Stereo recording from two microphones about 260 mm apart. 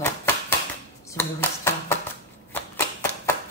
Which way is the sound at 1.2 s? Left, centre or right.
Centre.